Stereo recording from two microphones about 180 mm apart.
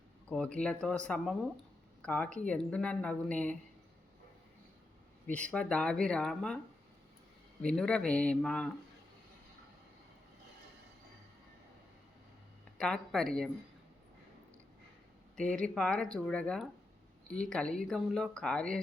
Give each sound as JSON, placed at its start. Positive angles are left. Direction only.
{"t": 0.3, "sound": "speech", "side_deg": 5}
{"t": 5.3, "sound": "speech", "side_deg": 5}
{"t": 7.6, "sound": "speech", "side_deg": 5}
{"t": 12.7, "sound": "a woman's voice", "side_deg": 5}
{"t": 15.4, "sound": "speech", "side_deg": 5}